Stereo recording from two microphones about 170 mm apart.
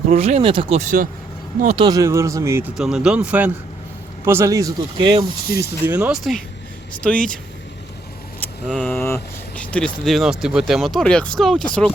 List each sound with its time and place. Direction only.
0.1 s speech: 40° right (ahead or behind)
0.8 s speech: 50° right (ahead or behind)
1.7 s speech: 25° right (ahead or behind)
2.7 s speech: 5° right (ahead or behind); by 5.5 s 30° right (ahead or behind)
5.8 s speech: 10° right (ahead or behind)
8.6 s speech: centre (ahead or behind)
8.9 s speech: 10° left (ahead or behind)